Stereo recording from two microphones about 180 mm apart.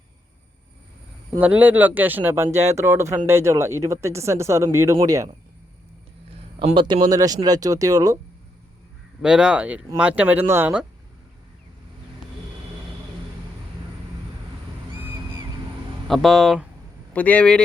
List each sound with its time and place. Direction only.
1.4 s speech: 10° right (ahead or behind)
6.7 s speech: 25° right (ahead or behind)
9.2 s speech: 5° right (ahead or behind)
16.0 s speech: centre (ahead or behind)